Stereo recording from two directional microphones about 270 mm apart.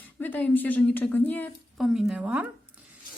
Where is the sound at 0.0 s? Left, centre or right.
Centre.